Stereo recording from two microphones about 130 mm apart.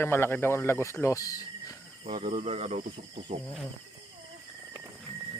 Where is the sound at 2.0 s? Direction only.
55° right (ahead or behind).